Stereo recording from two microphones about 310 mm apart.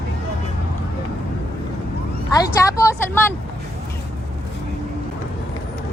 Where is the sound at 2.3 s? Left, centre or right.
Centre.